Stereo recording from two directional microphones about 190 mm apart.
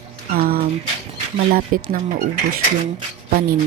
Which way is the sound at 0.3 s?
50° right (ahead or behind).